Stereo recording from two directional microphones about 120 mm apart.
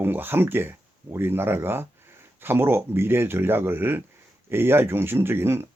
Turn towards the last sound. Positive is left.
turn(degrees=-20)  # may be behind; listen again after turning